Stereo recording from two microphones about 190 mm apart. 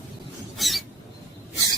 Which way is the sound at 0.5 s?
Centre (ahead or behind).